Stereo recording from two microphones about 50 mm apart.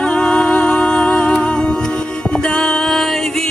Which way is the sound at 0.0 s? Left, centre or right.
Centre.